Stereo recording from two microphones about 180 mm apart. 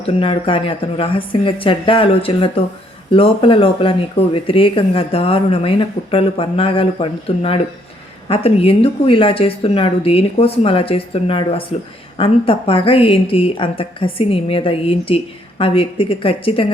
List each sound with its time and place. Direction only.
0.0 s a woman's voice: 30° left (ahead or behind)